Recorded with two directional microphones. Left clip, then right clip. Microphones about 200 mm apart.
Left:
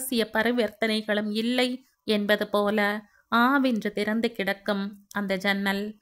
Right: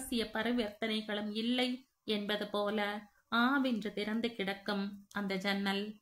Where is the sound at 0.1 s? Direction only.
50° left (ahead or behind).